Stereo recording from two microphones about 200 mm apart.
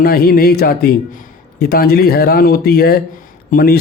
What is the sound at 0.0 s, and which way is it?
A man's voice, 50° left (ahead or behind).